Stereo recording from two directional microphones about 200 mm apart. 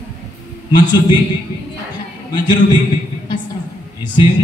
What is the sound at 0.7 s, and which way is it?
Speech, 20° left (ahead or behind).